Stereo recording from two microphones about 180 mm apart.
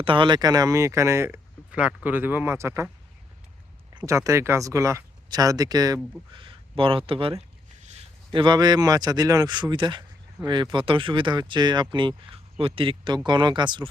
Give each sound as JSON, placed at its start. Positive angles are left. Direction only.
{"t": 0.0, "sound": "speech", "side_deg": -30}
{"t": 3.9, "sound": "speech", "side_deg": -20}